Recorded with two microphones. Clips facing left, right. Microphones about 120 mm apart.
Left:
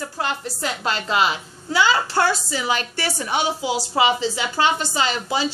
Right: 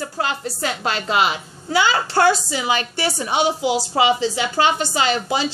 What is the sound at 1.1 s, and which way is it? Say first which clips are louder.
A woman's voice: right 1 dB; 20° right (ahead or behind).